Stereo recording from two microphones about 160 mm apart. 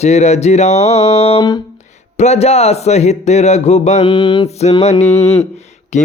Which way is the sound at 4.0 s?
30° left (ahead or behind).